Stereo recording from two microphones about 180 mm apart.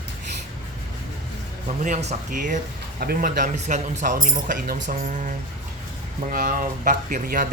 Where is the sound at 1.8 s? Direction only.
40° right (ahead or behind).